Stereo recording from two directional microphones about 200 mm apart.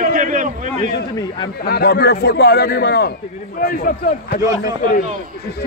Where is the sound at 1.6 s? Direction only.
50° left (ahead or behind).